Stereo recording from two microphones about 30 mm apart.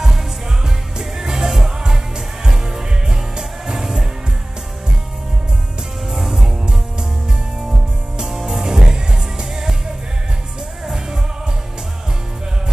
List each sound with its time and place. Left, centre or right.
1.1 s music: centre
6.0 s music: centre
6.4 s music: right
8.2 s music: centre